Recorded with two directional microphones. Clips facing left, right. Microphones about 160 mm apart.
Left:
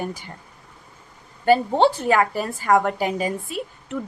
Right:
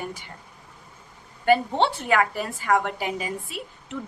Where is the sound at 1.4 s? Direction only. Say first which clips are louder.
Left 4 dB; 35° left (ahead or behind).